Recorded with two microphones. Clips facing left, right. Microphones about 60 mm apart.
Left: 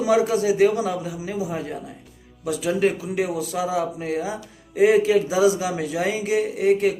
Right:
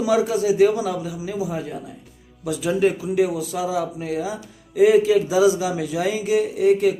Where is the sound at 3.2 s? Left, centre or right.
Left.